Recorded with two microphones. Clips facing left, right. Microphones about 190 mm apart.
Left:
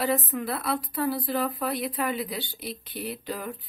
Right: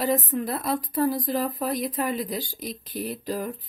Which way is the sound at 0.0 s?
40° right (ahead or behind).